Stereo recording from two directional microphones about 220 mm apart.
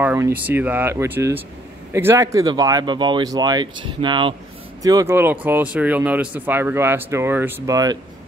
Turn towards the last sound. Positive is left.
turn(degrees=-15)  # may be behind; listen again after turning